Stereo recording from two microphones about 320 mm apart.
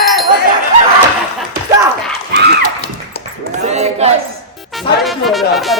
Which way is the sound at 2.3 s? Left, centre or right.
Right.